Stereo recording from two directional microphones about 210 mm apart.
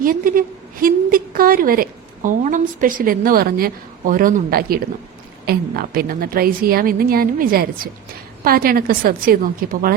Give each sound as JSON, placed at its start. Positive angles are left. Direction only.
{"t": 0.0, "sound": "a woman's voice", "side_deg": -40}